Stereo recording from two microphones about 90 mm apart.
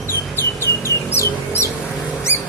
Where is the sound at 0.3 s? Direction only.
30° left (ahead or behind).